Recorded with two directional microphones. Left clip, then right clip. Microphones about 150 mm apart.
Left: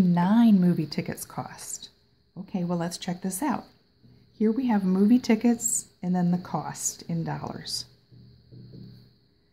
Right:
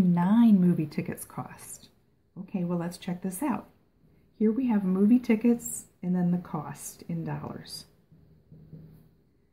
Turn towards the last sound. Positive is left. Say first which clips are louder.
# left 6 dB
turn(degrees=50)  # may be behind; listen again after turning